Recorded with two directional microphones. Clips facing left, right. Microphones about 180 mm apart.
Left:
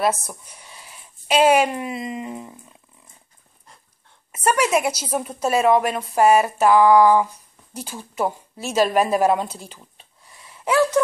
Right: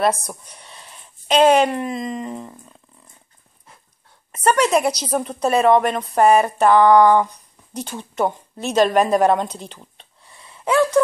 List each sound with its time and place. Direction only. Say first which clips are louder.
0.0 s a woman's voice: right 2 dB; 5° left (ahead or behind)
4.5 s a woman's voice: right 3 dB; 5° left (ahead or behind)
10.4 s gasp: right 2 dB; 25° right (ahead or behind)